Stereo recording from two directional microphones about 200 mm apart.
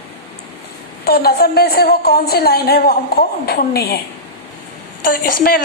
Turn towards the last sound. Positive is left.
turn(degrees=45)  # may be behind; listen again after turning